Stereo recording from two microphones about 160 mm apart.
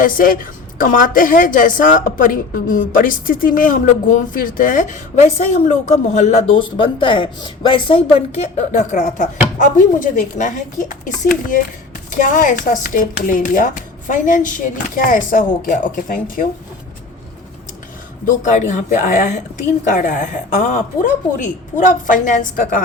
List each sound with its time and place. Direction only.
0.0 s a woman's voice: 60° left (ahead or behind)
18.3 s speech: 50° left (ahead or behind)